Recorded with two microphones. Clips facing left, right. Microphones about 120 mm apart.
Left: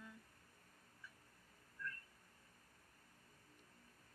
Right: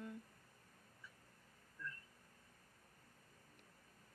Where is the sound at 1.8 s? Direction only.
20° right (ahead or behind).